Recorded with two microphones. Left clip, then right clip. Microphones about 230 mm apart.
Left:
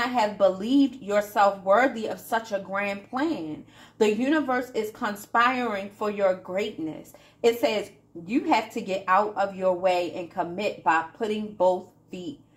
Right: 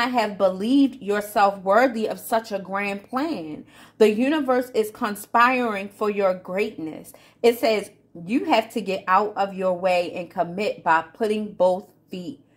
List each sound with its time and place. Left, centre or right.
0.0 s a woman's voice: right